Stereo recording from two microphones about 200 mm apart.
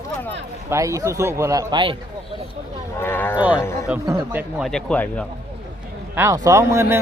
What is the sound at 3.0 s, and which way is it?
Speech, 10° left (ahead or behind).